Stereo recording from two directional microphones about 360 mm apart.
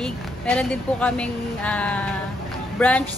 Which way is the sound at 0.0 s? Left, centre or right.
Centre.